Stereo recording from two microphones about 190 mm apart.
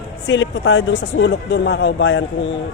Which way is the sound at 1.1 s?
65° left (ahead or behind).